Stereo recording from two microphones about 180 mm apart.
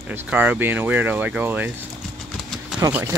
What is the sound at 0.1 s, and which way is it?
Speech, 10° right (ahead or behind).